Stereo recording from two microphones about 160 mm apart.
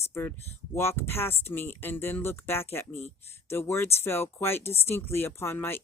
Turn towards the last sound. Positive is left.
turn(degrees=15)  # may be behind; listen again after turning